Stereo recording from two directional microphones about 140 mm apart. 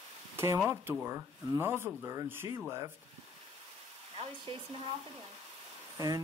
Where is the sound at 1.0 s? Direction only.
15° right (ahead or behind).